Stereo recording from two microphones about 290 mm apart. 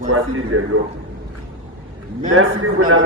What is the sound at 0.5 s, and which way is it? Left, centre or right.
Speech, right.